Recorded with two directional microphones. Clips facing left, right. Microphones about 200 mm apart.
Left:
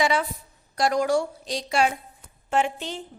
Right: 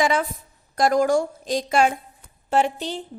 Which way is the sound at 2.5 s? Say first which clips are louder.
Right 3 dB; 35° right (ahead or behind).